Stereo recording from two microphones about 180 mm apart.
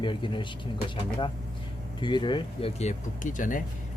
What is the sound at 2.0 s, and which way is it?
Speech, 25° left (ahead or behind).